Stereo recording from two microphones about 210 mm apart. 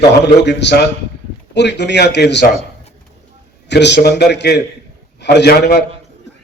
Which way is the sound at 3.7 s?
55° left (ahead or behind).